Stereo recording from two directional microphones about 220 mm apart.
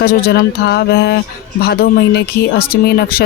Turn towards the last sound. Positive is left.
turn(degrees=45)  # may be behind; listen again after turning